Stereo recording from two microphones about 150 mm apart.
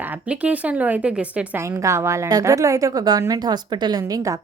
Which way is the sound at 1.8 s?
20° right (ahead or behind).